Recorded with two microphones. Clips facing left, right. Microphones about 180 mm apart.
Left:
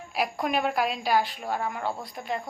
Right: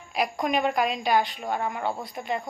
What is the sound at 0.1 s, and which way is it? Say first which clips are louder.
A woman's voice: right 2 dB; 5° left (ahead or behind).